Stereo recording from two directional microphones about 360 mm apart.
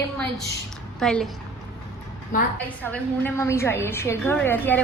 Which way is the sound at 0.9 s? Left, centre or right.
Centre.